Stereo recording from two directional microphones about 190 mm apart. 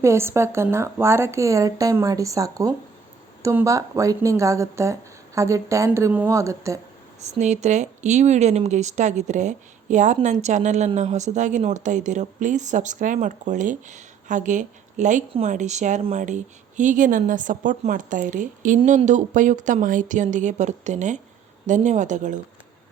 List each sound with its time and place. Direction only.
0.0 s speech: 15° right (ahead or behind)
7.2 s a woman's voice: 35° right (ahead or behind)